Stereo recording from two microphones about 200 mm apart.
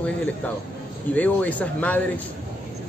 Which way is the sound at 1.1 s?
5° left (ahead or behind).